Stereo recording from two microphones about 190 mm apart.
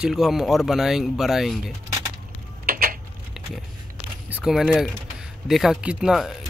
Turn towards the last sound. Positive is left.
turn(degrees=-5)  # may be behind; listen again after turning